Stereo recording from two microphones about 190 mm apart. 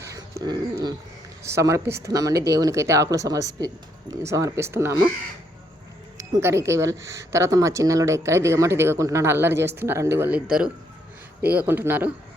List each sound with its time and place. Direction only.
0.0 s dog: 15° right (ahead or behind)
1.5 s speech: 15° right (ahead or behind)
6.1 s speech: 15° right (ahead or behind)
11.4 s speech: 10° right (ahead or behind)